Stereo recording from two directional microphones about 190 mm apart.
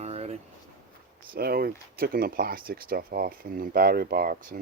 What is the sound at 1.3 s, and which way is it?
Speech, 55° right (ahead or behind).